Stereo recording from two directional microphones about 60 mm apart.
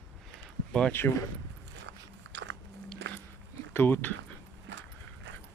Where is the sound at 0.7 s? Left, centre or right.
Centre.